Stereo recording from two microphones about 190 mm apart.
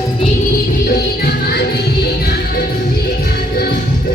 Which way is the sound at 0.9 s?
55° left (ahead or behind).